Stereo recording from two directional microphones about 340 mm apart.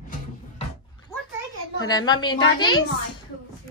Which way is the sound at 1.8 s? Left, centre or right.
Centre.